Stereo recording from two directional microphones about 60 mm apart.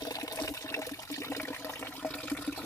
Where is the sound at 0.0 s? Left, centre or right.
Left.